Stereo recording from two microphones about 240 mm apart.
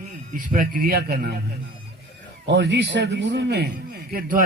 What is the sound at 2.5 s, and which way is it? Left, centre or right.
A man's voice, right.